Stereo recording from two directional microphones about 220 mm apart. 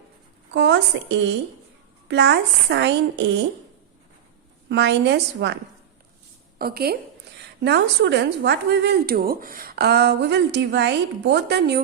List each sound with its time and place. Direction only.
0.5 s a woman's voice: 55° right (ahead or behind)
2.0 s a woman's voice: 50° right (ahead or behind)
4.7 s a woman's voice: 50° right (ahead or behind)
6.6 s a woman's voice: 45° right (ahead or behind)